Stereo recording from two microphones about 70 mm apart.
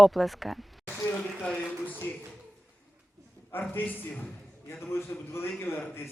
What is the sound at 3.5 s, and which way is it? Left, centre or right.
A man's voice, left.